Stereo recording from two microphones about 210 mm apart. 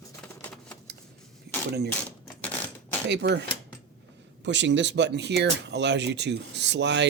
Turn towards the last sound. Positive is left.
turn(degrees=-55)  # may be behind; listen again after turning